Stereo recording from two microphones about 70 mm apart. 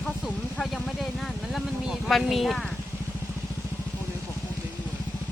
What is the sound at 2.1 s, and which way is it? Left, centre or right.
Speech, centre.